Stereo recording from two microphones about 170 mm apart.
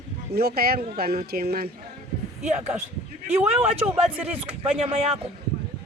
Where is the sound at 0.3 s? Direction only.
65° right (ahead or behind).